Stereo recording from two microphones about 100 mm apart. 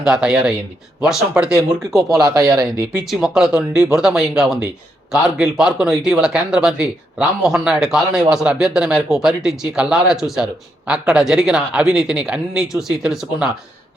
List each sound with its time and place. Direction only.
0.0 s speech: 5° right (ahead or behind)
2.2 s speech: 35° right (ahead or behind)
3.1 s speech: 5° right (ahead or behind)